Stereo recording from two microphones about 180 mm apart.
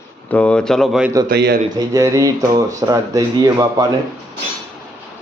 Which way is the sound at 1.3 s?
65° right (ahead or behind).